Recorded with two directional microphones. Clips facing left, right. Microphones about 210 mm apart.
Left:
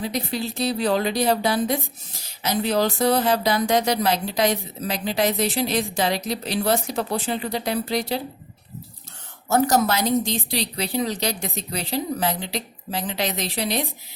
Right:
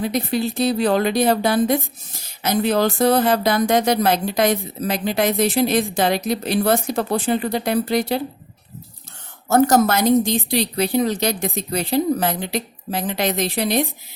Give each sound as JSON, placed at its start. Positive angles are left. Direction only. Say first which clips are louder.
{"t": 0.0, "sound": "speech", "louder": "right 5 dB", "side_deg": -55}
{"t": 9.5, "sound": "speech", "louder": "right 4 dB", "side_deg": -50}